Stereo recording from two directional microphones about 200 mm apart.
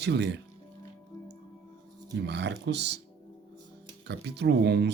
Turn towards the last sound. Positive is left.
turn(degrees=-60)  # may be behind; listen again after turning